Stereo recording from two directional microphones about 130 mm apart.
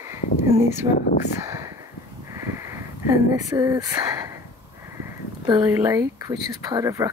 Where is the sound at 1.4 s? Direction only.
25° right (ahead or behind).